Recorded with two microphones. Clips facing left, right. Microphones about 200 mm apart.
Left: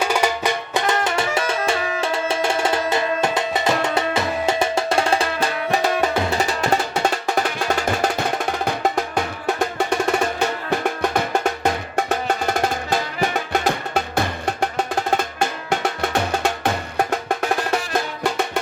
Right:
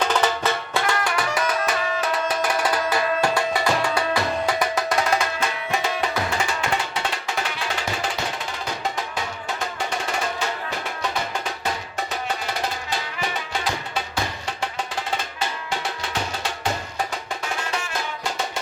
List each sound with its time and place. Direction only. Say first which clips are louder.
0.0 s music: left 1 dB; 10° left (ahead or behind); by 9.2 s 55° left (ahead or behind)
10.7 s music: left 8 dB; 60° left (ahead or behind)
14.4 s percussion: left 7 dB; 45° left (ahead or behind)
17.0 s music: left 7 dB; 50° left (ahead or behind)